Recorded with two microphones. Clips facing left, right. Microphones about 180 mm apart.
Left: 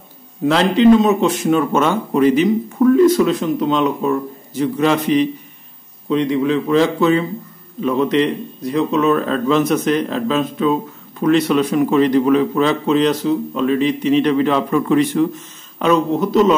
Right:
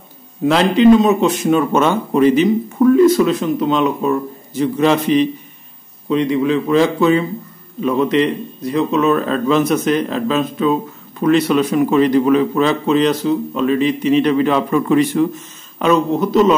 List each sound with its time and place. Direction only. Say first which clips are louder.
0.5 s speech: right 1 dB; 10° right (ahead or behind)
2.8 s speech: right 1 dB; 5° right (ahead or behind)
4.6 s speech: right 2 dB; 20° right (ahead or behind)
6.0 s speech: right 1 dB; 5° right (ahead or behind)